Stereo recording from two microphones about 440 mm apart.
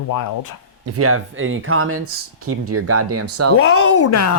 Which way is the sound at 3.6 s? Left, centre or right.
Left.